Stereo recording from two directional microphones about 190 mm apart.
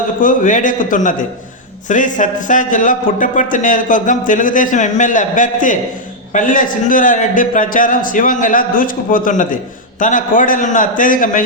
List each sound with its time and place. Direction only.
0.2 s speech: 45° left (ahead or behind)